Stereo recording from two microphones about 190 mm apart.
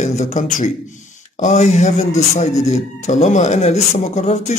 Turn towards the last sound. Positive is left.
turn(degrees=35)  # may be behind; listen again after turning